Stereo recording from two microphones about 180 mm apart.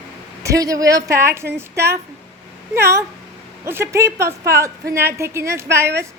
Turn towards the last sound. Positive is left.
turn(degrees=-15)  # may be behind; listen again after turning